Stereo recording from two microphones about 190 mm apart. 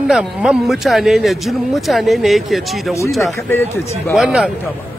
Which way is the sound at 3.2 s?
10° left (ahead or behind).